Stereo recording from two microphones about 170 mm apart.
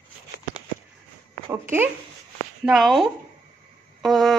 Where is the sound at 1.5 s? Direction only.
15° right (ahead or behind).